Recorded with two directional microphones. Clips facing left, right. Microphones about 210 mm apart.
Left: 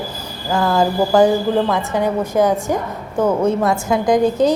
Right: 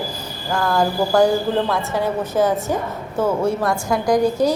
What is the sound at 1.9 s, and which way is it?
A woman's voice, 15° left (ahead or behind).